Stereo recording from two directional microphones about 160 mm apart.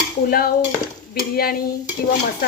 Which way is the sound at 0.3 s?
70° left (ahead or behind).